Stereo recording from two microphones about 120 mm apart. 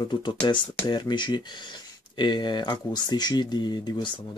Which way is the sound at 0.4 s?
35° left (ahead or behind).